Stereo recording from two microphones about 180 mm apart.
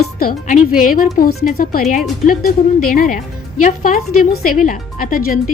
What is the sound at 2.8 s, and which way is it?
Speech, 50° left (ahead or behind).